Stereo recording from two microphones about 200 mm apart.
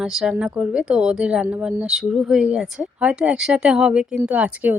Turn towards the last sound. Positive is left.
turn(degrees=-5)  # may be behind; listen again after turning